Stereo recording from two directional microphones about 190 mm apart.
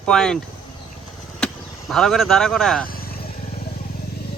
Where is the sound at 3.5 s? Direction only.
55° left (ahead or behind).